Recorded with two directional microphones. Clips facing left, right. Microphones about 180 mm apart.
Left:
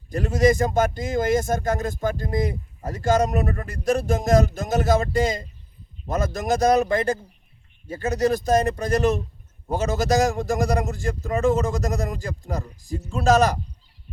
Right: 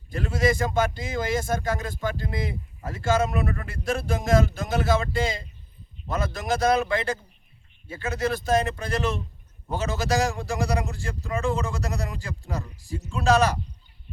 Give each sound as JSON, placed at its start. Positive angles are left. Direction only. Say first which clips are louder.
{"t": 0.1, "sound": "a man's voice", "louder": "left 5 dB", "side_deg": 45}